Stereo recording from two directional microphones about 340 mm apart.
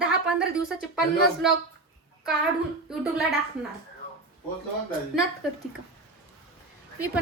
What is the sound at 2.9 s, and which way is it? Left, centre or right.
Speech, centre.